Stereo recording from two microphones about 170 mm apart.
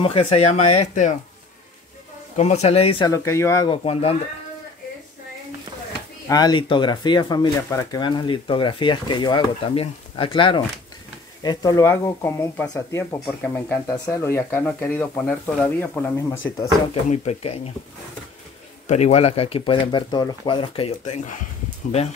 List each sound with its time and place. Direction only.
0.0 s speech: 30° left (ahead or behind)
2.3 s speech: 40° left (ahead or behind)
3.1 s speech: 20° left (ahead or behind)
3.7 s speech: 35° left (ahead or behind)
6.2 s speech: 25° left (ahead or behind)
17.1 s speech: 40° left (ahead or behind)
18.9 s speech: 45° left (ahead or behind)